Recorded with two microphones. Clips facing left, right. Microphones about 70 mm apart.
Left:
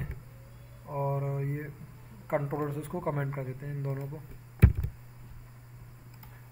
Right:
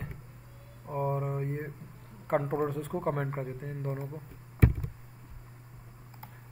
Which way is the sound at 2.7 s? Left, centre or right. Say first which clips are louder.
Right 2 dB; centre.